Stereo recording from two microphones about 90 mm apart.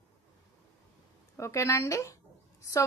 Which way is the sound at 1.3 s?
30° left (ahead or behind).